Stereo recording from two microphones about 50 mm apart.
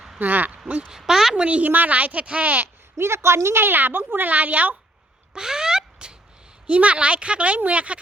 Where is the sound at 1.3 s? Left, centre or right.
Right.